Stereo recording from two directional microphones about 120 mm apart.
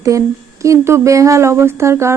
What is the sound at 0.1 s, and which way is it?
Speech, 25° right (ahead or behind).